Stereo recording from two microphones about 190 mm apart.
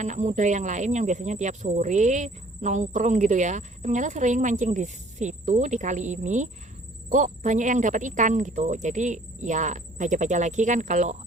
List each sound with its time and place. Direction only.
0.0 s speech: 40° right (ahead or behind)